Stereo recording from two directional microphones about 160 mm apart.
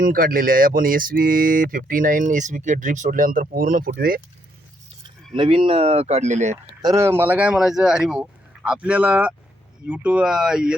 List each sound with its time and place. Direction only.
0.0 s speech: 65° right (ahead or behind)
5.3 s speech: 35° right (ahead or behind)
6.8 s speech: 20° right (ahead or behind)